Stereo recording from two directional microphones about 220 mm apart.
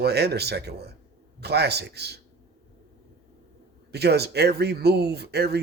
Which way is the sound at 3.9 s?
50° right (ahead or behind).